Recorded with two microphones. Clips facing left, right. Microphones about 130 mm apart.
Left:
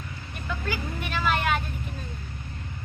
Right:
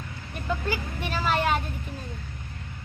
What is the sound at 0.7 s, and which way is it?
Vehicle, 35° right (ahead or behind).